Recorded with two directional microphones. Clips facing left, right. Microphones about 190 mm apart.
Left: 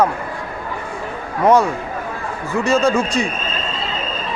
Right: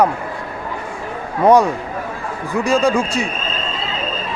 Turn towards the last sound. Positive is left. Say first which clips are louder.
# even
turn(degrees=-10)  # may be behind; listen again after turning